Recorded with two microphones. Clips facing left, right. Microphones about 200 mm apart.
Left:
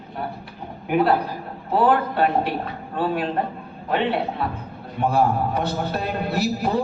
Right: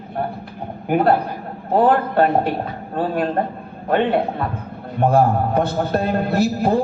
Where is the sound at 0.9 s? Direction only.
50° right (ahead or behind).